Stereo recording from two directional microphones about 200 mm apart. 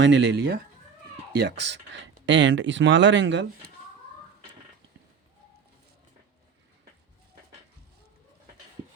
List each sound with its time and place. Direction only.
0.0 s speech: 60° right (ahead or behind)